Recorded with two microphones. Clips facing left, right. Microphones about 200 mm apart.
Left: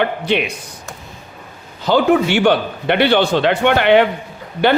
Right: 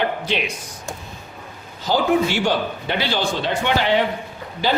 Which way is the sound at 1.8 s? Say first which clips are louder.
Left 5 dB; 65° left (ahead or behind).